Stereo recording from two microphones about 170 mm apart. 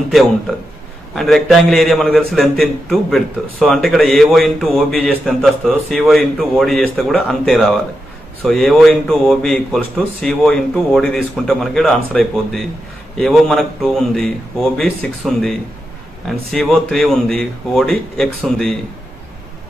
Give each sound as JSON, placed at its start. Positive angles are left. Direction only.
{"t": 1.1, "sound": "a man's voice", "side_deg": 0}